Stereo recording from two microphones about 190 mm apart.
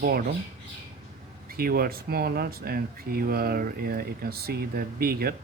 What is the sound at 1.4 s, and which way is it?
Speech, 50° right (ahead or behind).